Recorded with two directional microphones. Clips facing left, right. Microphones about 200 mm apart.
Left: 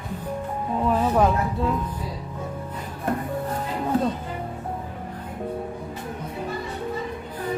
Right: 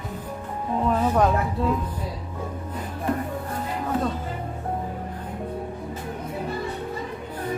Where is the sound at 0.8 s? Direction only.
5° left (ahead or behind).